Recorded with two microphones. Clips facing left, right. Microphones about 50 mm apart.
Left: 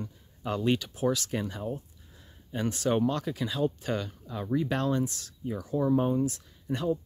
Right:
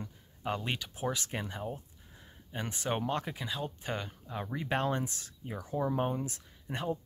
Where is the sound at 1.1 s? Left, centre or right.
Right.